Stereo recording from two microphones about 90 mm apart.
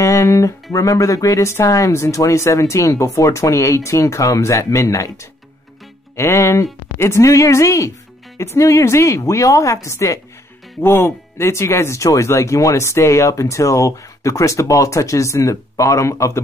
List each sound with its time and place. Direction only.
0.0 s speech: 35° left (ahead or behind)